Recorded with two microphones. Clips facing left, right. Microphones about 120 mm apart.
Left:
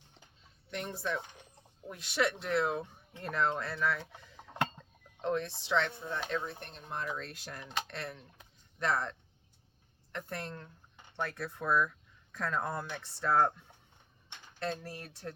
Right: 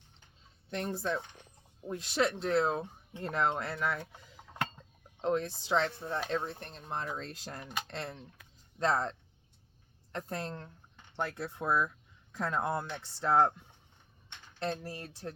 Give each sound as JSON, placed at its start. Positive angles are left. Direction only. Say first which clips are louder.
{"t": 0.7, "sound": "speech", "louder": "right 3 dB", "side_deg": -30}
{"t": 4.4, "sound": "a sound", "louder": "left 3 dB", "side_deg": 0}
{"t": 5.2, "sound": "speech", "louder": "right 2 dB", "side_deg": -35}
{"t": 14.7, "sound": "speech", "louder": "right 2 dB", "side_deg": -20}